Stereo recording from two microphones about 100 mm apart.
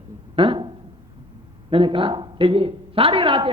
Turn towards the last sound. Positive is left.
turn(degrees=-60)  # may be behind; listen again after turning